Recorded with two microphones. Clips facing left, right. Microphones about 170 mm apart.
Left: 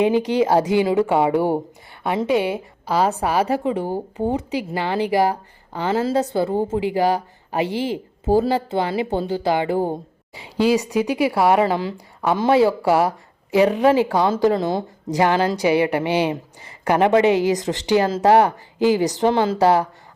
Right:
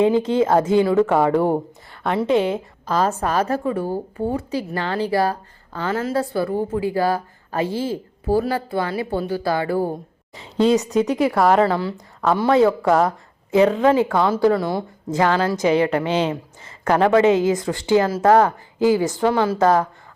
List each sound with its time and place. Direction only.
0.0 s a woman's voice: 15° left (ahead or behind)
10.3 s a woman's voice: 10° left (ahead or behind)
11.6 s a woman's voice: 15° left (ahead or behind)
19.5 s a woman's voice: 15° left (ahead or behind)